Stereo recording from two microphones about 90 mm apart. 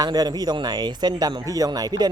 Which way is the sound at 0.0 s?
50° right (ahead or behind).